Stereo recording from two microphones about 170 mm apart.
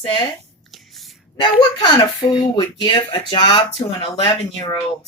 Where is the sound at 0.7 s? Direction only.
Centre (ahead or behind).